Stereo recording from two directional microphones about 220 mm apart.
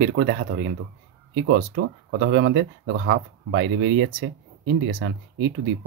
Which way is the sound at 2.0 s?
55° right (ahead or behind).